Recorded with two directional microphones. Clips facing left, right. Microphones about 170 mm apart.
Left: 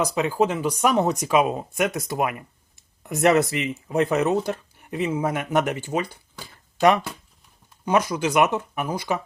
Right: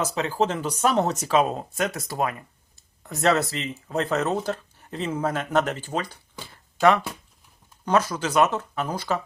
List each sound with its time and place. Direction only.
0.0 s speech: 15° left (ahead or behind)
6.4 s a sound: 15° left (ahead or behind)
7.9 s speech: 15° left (ahead or behind)